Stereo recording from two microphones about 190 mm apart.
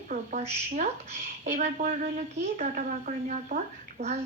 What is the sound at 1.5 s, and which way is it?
A woman's voice, 40° right (ahead or behind).